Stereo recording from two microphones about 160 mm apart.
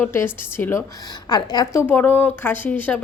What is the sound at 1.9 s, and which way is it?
A woman's voice, 10° left (ahead or behind).